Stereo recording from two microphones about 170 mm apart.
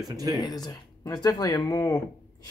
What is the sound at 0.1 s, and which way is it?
Speech, 20° right (ahead or behind).